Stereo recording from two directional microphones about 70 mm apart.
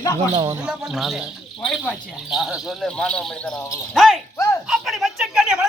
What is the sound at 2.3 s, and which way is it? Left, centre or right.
Speech, centre.